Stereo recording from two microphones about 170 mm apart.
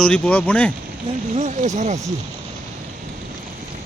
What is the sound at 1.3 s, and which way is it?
Speech, 45° right (ahead or behind).